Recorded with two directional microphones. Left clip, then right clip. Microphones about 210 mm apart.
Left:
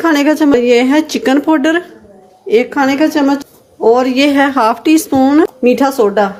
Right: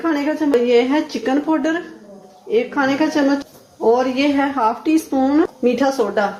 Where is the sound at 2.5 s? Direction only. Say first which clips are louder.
Left 6 dB; 55° left (ahead or behind).